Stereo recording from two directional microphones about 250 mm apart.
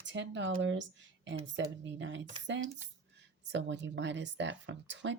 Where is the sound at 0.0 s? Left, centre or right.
Right.